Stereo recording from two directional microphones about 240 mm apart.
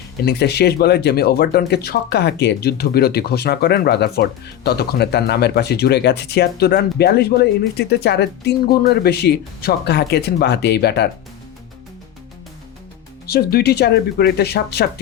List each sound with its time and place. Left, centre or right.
0.3 s speech: left
13.2 s speech: left